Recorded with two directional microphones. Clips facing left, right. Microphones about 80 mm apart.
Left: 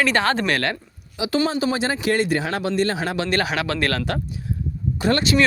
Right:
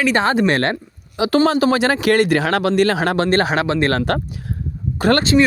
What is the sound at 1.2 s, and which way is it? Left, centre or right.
Speech, right.